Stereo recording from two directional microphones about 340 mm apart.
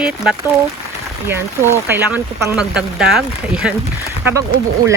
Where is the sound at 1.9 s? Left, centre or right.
Centre.